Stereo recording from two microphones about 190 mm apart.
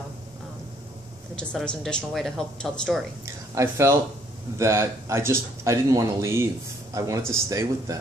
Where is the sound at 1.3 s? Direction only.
5° left (ahead or behind).